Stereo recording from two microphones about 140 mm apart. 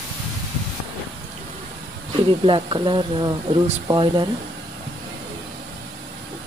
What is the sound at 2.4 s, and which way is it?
Speech, 35° right (ahead or behind).